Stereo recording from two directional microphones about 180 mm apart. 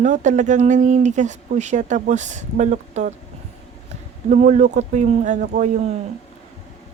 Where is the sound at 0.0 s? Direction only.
40° right (ahead or behind).